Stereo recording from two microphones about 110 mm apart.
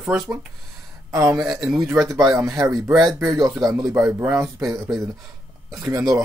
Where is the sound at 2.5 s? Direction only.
30° right (ahead or behind).